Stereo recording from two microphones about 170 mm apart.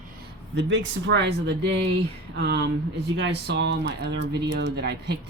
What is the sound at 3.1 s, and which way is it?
Speech, 90° right.